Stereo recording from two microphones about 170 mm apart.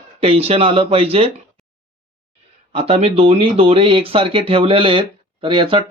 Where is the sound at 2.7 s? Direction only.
35° right (ahead or behind).